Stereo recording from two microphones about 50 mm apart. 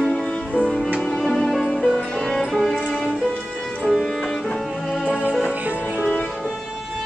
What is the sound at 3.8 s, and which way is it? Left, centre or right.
Music, centre.